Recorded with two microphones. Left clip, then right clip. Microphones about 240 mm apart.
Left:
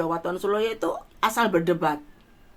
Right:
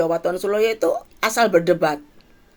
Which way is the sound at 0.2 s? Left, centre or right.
Right.